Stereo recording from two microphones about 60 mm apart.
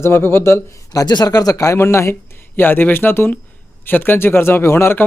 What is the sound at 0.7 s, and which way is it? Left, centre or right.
A man's voice, left.